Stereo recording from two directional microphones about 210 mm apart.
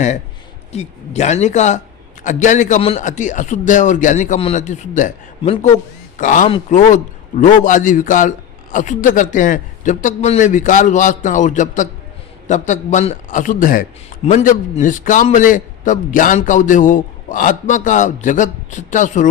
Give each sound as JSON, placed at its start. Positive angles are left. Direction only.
{"t": 0.7, "sound": "a man's voice", "side_deg": 30}